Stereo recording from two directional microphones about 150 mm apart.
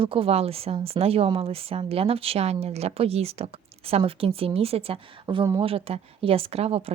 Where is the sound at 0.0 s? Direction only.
35° right (ahead or behind).